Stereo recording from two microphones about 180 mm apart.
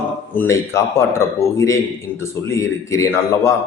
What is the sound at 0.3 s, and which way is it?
A man's voice, 15° left (ahead or behind).